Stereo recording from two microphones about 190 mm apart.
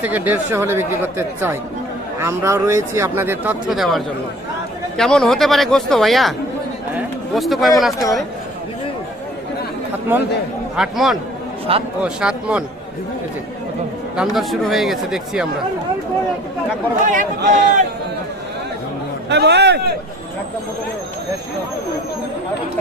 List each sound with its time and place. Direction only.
0.0 s speech: 10° right (ahead or behind)
10.1 s speech: 10° right (ahead or behind)
11.7 s speech: 30° right (ahead or behind)
12.0 s speech: 5° right (ahead or behind)
14.2 s speech: centre (ahead or behind)
17.1 s a man's voice: 45° right (ahead or behind)
19.3 s a man's voice: 60° right (ahead or behind)